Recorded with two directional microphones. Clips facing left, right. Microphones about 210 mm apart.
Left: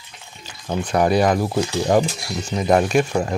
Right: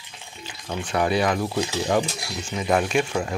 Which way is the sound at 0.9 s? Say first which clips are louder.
Left 5 dB; 40° left (ahead or behind).